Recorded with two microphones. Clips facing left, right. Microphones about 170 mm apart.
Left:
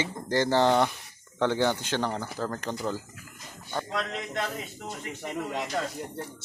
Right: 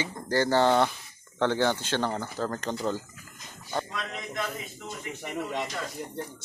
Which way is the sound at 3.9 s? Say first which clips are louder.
Left 4 dB; 65° left (ahead or behind).